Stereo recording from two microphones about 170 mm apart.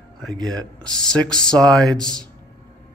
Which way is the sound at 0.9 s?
5° left (ahead or behind).